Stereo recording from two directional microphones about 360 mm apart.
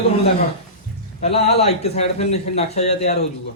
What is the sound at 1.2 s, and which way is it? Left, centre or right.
A man's voice, centre.